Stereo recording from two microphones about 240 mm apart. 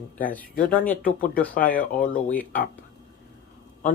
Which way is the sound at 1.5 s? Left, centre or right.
Left.